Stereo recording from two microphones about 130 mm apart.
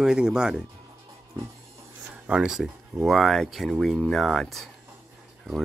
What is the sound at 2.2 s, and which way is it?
Speech, 5° right (ahead or behind).